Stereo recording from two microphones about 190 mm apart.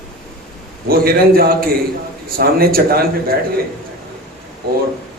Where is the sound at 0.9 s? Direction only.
50° right (ahead or behind).